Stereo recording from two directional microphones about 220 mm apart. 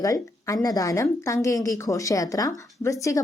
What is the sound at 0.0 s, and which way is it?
A woman's voice, 15° left (ahead or behind).